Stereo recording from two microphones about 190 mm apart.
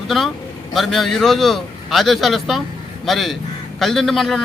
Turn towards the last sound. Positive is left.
turn(degrees=0)  # may be behind; listen again after turning